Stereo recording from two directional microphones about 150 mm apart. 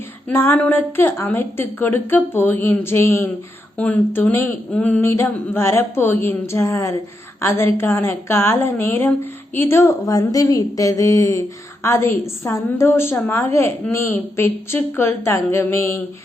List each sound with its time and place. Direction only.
0.3 s a woman's voice: 15° left (ahead or behind)